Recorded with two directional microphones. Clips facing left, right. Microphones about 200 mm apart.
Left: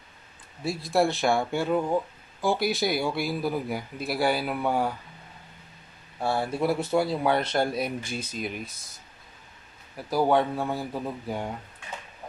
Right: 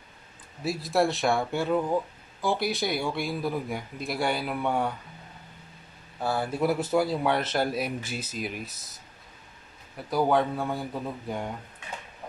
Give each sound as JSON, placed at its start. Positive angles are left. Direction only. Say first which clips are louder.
{"t": 0.7, "sound": "speech", "louder": "left 1 dB", "side_deg": 0}
{"t": 6.2, "sound": "speech", "louder": "left 1 dB", "side_deg": 25}
{"t": 6.5, "sound": "speech", "louder": "right 1 dB", "side_deg": 0}
{"t": 9.9, "sound": "speech", "louder": "left 1 dB", "side_deg": 0}